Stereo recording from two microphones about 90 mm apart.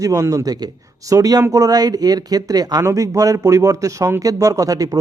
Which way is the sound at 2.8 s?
35° right (ahead or behind).